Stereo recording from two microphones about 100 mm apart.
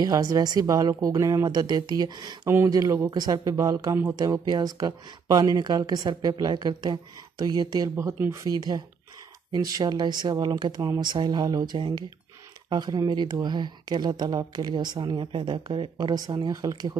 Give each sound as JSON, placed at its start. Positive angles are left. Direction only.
{"t": 0.0, "sound": "speech", "side_deg": -40}
{"t": 7.9, "sound": "speech", "side_deg": -25}
{"t": 8.5, "sound": "speech", "side_deg": -40}